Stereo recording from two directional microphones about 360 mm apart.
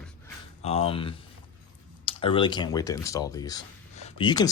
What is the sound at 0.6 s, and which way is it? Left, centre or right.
Speech, centre.